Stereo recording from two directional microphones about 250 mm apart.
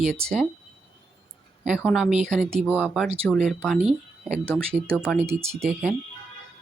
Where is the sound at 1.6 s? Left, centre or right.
Centre.